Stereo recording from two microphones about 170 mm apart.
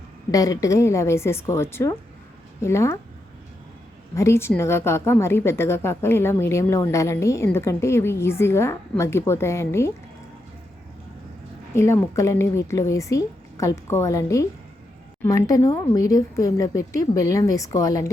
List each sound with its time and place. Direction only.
0.3 s a woman's voice: 20° left (ahead or behind)
4.1 s a woman's voice: 15° left (ahead or behind)
11.7 s a woman's voice: 15° left (ahead or behind)